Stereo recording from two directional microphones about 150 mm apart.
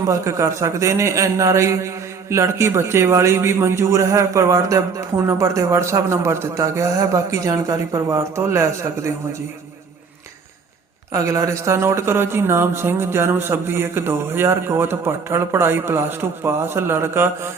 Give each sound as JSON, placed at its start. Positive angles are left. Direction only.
{"t": 0.1, "sound": "a man's voice", "side_deg": -20}
{"t": 11.1, "sound": "speech", "side_deg": -20}